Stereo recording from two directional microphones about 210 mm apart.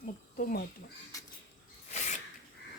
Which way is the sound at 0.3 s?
40° left (ahead or behind).